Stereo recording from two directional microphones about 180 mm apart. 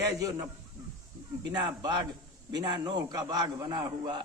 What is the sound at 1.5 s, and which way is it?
A man's voice, 25° right (ahead or behind).